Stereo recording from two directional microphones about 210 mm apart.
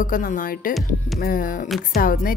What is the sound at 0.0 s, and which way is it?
A woman's voice, 40° left (ahead or behind).